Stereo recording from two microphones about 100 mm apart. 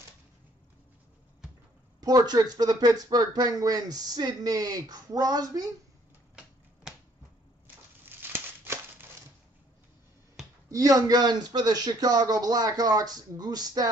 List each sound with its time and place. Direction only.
2.0 s speech: 40° right (ahead or behind)
6.9 s finger snapping: 5° right (ahead or behind)
8.0 s a sound: 20° right (ahead or behind)
10.7 s speech: 40° right (ahead or behind)